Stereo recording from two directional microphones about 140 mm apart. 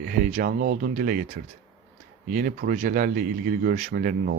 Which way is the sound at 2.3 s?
75° right (ahead or behind).